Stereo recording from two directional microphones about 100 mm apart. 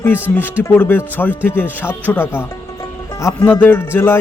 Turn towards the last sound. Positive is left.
turn(degrees=25)  # may be behind; listen again after turning